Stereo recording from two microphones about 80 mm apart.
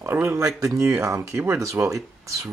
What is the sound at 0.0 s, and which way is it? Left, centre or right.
Speech, right.